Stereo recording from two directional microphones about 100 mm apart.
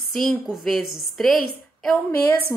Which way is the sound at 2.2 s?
25° left (ahead or behind).